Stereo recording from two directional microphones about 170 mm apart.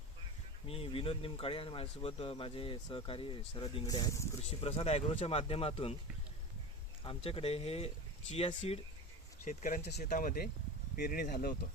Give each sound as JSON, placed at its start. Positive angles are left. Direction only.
{"t": 0.7, "sound": "speech", "side_deg": 35}
{"t": 4.6, "sound": "speech", "side_deg": 35}
{"t": 7.0, "sound": "speech", "side_deg": 35}
{"t": 9.4, "sound": "speech", "side_deg": 50}